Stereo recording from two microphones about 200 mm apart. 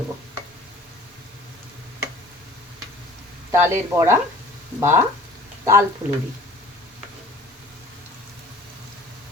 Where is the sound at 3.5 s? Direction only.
10° right (ahead or behind).